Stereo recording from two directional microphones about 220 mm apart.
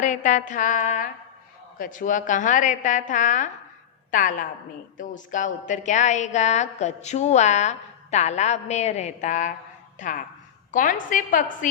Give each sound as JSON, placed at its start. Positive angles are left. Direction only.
{"t": 0.0, "sound": "a woman's voice", "side_deg": 35}